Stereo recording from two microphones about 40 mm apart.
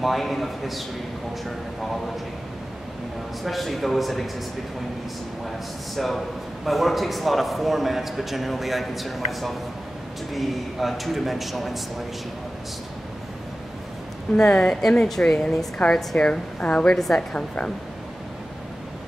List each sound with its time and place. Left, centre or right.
0.0 s a man's voice: centre
3.4 s a man's voice: centre
5.9 s a man's voice: centre
14.4 s speech: centre
16.3 s a woman's voice: left
17.1 s a man's voice: centre